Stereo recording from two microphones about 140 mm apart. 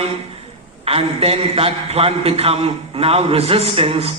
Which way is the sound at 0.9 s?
45° right (ahead or behind).